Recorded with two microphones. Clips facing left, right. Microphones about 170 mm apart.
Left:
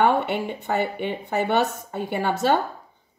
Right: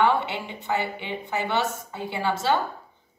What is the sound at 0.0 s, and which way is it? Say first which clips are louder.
Speech: left 2 dB; 50° left (ahead or behind).